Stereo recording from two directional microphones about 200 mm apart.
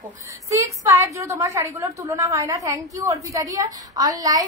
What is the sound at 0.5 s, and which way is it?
A woman's voice, 15° right (ahead or behind).